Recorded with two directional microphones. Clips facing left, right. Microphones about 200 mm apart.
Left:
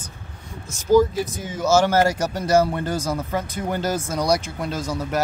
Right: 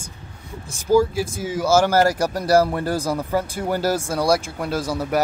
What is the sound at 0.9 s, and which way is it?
Speech, 10° right (ahead or behind).